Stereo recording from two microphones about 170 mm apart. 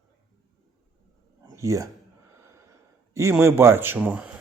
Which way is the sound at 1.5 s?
20° right (ahead or behind).